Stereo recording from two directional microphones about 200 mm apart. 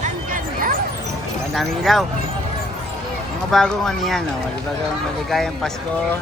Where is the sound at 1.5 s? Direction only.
Centre (ahead or behind).